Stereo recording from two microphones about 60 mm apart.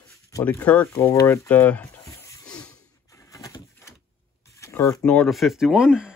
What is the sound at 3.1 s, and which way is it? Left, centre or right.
Bird, left.